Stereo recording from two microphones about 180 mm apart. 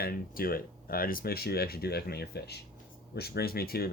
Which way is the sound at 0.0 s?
55° left (ahead or behind).